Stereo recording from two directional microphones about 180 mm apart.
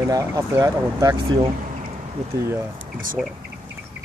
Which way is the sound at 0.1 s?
20° right (ahead or behind).